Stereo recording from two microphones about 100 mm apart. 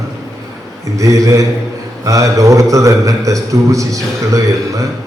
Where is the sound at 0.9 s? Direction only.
35° right (ahead or behind).